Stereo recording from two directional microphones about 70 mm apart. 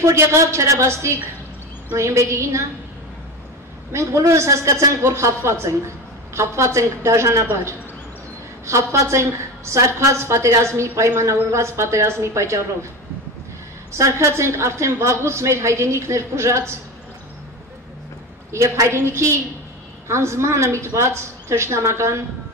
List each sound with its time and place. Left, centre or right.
0.0 s a woman's voice: right
3.9 s a woman's voice: right
8.6 s a woman's voice: right
13.9 s a woman's voice: right
18.5 s a woman's voice: right